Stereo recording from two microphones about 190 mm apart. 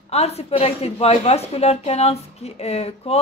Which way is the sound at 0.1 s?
35° left (ahead or behind).